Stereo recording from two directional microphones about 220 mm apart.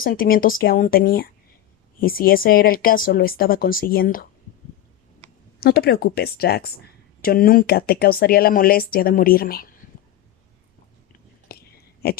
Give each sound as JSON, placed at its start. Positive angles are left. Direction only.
{"t": 0.0, "sound": "speech", "side_deg": 40}
{"t": 5.5, "sound": "speech", "side_deg": 45}
{"t": 11.5, "sound": "a sound", "side_deg": 45}
{"t": 12.0, "sound": "speech", "side_deg": 45}